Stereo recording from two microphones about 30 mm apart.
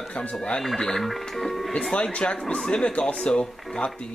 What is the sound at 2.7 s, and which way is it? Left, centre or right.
Speech, left.